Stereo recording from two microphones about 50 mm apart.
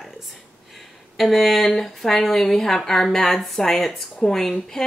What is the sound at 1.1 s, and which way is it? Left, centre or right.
Speech, centre.